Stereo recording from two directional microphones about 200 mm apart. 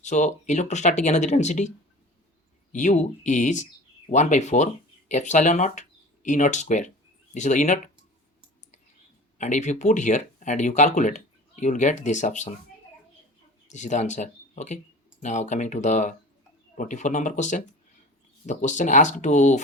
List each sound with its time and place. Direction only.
0.0 s speech: 35° left (ahead or behind)
2.7 s speech: 35° left (ahead or behind)
9.4 s speech: 35° left (ahead or behind)
13.7 s speech: 35° left (ahead or behind)